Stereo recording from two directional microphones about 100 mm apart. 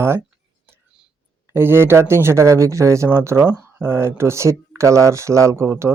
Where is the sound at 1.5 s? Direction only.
25° right (ahead or behind).